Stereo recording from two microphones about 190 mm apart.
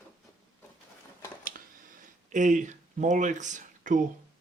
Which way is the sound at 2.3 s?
40° right (ahead or behind).